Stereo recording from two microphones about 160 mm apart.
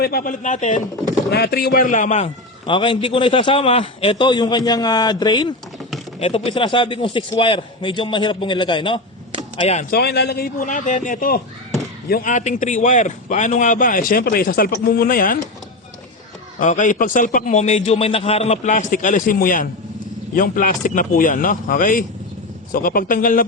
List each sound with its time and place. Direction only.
0.0 s a man's voice: 65° left (ahead or behind); by 0.8 s 50° left (ahead or behind)
1.3 s a man's voice: 75° left (ahead or behind); by 2.3 s 45° left (ahead or behind)
2.6 s a man's voice: 30° left (ahead or behind)
9.6 s a man's voice: 40° left (ahead or behind)
9.9 s a man's voice: 85° left; by 15.4 s 60° left (ahead or behind)
16.6 s a man's voice: 50° left (ahead or behind)